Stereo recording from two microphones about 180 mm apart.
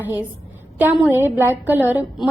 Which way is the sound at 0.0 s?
10° right (ahead or behind).